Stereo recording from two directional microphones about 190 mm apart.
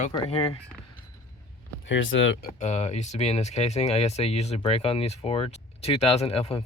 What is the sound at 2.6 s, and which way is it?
Speech, 40° left (ahead or behind).